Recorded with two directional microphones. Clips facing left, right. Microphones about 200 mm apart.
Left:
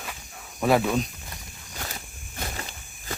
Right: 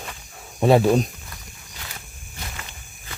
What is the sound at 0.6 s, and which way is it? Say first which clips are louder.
Speech: right 6 dB; 30° right (ahead or behind).